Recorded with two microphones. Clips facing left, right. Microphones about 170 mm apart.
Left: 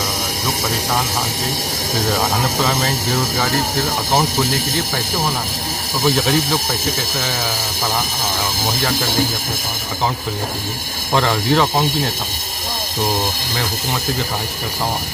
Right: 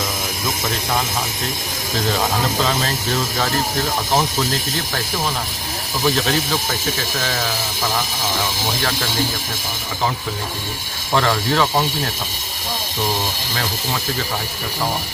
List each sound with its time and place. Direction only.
2.6 s speech: 10° left (ahead or behind)
6.0 s speech: 15° left (ahead or behind)
11.1 s speech: 15° left (ahead or behind)